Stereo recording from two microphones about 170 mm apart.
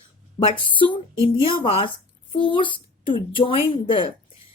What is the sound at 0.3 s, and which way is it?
Speech, 30° left (ahead or behind).